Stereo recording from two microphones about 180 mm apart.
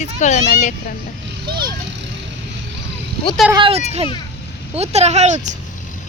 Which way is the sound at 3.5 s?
30° right (ahead or behind).